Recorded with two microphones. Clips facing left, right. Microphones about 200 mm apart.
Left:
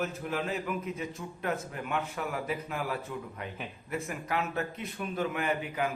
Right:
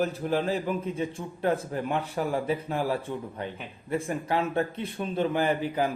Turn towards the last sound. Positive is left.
turn(degrees=-30)  # may be behind; listen again after turning